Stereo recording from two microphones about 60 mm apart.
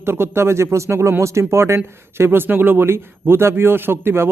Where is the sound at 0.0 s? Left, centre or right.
Right.